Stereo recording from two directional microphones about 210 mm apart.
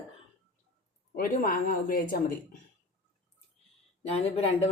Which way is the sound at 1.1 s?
40° left (ahead or behind).